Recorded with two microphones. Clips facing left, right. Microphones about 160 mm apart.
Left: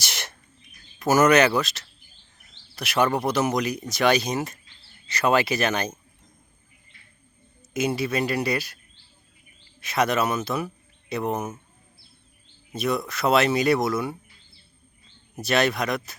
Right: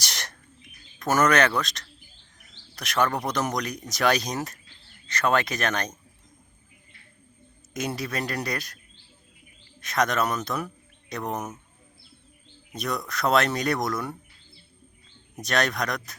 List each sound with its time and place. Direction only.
0.0 s bird: 5° left (ahead or behind)
0.9 s speech: 5° left (ahead or behind)
7.7 s speech: 5° left (ahead or behind)
9.8 s speech: 5° left (ahead or behind)
12.7 s speech: 5° left (ahead or behind)
15.4 s speech: 5° left (ahead or behind)